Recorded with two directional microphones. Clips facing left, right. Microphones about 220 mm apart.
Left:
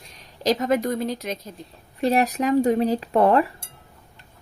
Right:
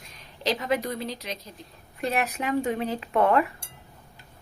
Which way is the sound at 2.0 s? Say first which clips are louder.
Left 7 dB; 35° left (ahead or behind).